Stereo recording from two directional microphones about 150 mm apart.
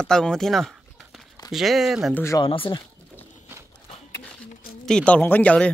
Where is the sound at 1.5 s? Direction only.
Centre (ahead or behind).